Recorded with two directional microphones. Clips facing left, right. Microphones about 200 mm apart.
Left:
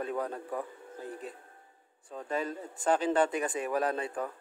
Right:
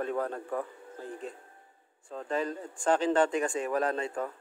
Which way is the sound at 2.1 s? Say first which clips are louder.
Right 2 dB; centre (ahead or behind).